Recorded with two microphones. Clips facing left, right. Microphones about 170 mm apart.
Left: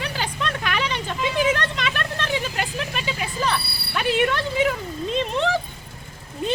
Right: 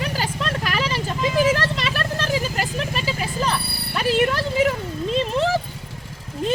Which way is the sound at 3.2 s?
Centre (ahead or behind).